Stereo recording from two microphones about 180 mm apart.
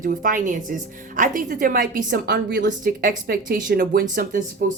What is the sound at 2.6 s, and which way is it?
Speech, 50° right (ahead or behind).